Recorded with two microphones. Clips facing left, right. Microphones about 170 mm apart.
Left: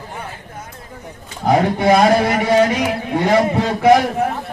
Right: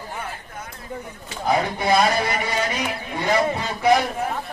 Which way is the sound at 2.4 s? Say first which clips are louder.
Left 10 dB; 90° left.